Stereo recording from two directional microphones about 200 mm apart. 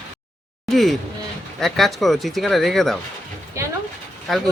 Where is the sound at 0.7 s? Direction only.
Centre (ahead or behind).